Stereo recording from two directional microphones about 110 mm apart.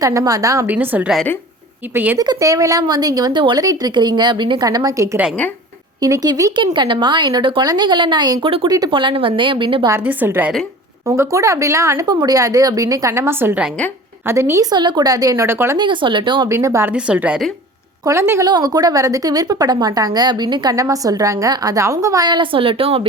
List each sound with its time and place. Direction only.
0.0 s a woman's voice: 30° right (ahead or behind)
0.7 s a woman's voice: 15° right (ahead or behind)
2.1 s a woman's voice: 35° right (ahead or behind)
6.7 s a woman's voice: 45° right (ahead or behind)
9.9 s a woman's voice: 15° right (ahead or behind)
11.0 s a woman's voice: 25° right (ahead or behind)
14.7 s a woman's voice: 40° right (ahead or behind); by 15.8 s 25° right (ahead or behind)
15.8 s a woman's voice: 45° right (ahead or behind)
16.5 s a woman's voice: 25° right (ahead or behind)
16.9 s a woman's voice: 10° right (ahead or behind)
18.0 s a woman's voice: 25° right (ahead or behind)
18.4 s a woman's voice: 35° right (ahead or behind); by 23.0 s 60° right (ahead or behind)